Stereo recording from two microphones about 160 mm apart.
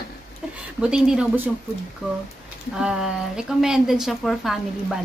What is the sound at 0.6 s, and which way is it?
Speech, 5° right (ahead or behind).